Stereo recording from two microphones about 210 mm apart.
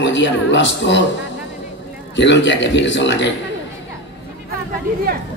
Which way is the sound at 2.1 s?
60° left (ahead or behind).